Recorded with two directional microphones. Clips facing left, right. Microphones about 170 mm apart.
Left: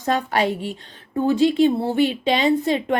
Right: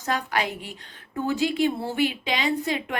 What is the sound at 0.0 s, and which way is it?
A woman's voice, 30° left (ahead or behind).